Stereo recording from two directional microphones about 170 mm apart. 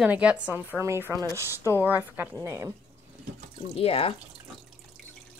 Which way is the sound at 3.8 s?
35° left (ahead or behind).